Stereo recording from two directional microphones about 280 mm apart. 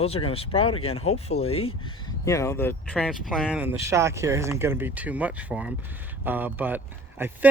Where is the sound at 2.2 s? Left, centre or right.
Centre.